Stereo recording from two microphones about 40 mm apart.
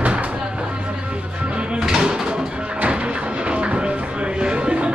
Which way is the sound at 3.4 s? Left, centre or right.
Right.